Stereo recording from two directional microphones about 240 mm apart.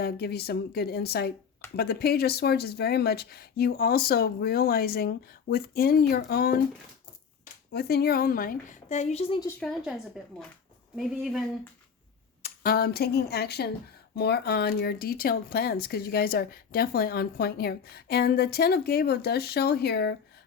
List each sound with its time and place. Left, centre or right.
0.0 s speech: left
7.7 s speech: left
9.5 s speech: centre
12.4 s speech: left